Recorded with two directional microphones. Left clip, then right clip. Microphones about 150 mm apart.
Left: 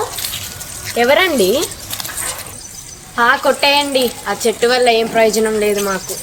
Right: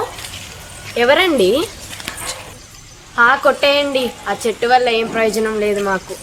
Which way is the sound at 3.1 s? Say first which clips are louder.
Right 1 dB; 15° right (ahead or behind).